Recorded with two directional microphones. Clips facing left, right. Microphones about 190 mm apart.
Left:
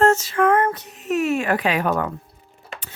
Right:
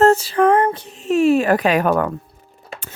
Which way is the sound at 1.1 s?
30° right (ahead or behind).